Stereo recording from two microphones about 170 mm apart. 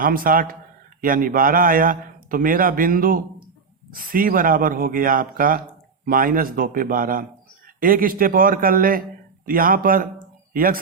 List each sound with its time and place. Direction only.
0.0 s a man's voice: 55° right (ahead or behind)